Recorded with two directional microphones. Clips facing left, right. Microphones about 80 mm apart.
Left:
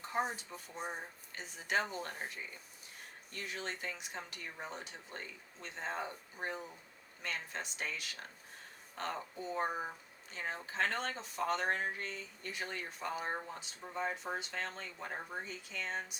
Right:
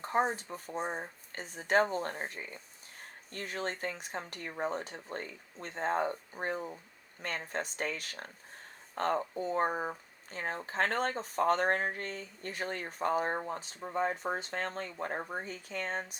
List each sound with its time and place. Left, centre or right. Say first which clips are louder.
0.0 s speech: right 6 dB; right